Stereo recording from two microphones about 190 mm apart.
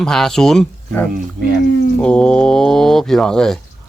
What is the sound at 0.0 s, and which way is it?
Speech, 5° left (ahead or behind).